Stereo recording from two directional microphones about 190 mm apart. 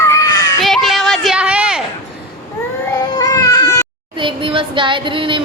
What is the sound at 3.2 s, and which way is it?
Baby cry, 20° left (ahead or behind).